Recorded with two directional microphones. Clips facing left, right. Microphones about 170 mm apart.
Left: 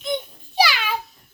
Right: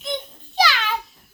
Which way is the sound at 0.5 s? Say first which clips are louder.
Even; 10° left (ahead or behind).